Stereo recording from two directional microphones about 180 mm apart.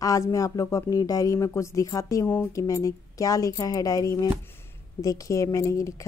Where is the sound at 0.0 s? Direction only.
20° left (ahead or behind).